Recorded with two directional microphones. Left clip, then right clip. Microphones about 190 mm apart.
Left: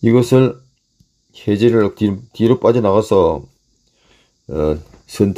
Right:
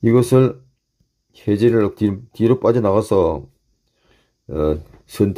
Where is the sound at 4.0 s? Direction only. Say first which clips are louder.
Left 4 dB; centre (ahead or behind).